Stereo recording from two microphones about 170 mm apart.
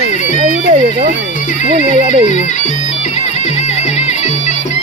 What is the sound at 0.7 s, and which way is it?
Speech, 45° right (ahead or behind).